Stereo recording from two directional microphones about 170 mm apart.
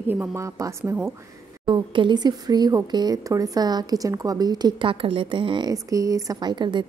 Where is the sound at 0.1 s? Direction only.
15° right (ahead or behind).